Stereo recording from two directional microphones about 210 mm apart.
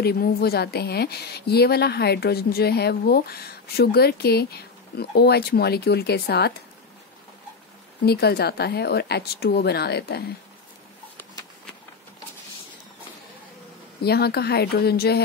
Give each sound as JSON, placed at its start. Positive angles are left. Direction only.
{"t": 0.0, "sound": "a woman's voice", "side_deg": 45}
{"t": 8.0, "sound": "a woman's voice", "side_deg": 50}
{"t": 14.0, "sound": "a woman's voice", "side_deg": 50}